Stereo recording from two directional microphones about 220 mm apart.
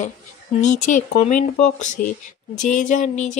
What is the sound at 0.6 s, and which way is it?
Speech, 35° left (ahead or behind).